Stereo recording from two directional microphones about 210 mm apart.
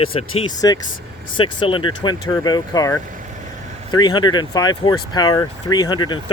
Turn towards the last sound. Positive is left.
turn(degrees=20)  # may be behind; listen again after turning